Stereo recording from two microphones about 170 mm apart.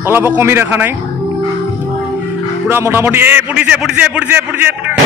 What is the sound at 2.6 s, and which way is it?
A man's voice, 15° right (ahead or behind).